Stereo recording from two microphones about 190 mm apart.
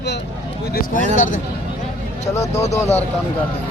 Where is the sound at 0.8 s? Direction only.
45° left (ahead or behind).